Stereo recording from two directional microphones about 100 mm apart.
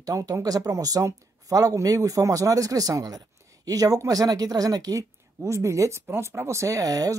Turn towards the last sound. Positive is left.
turn(degrees=-35)  # may be behind; listen again after turning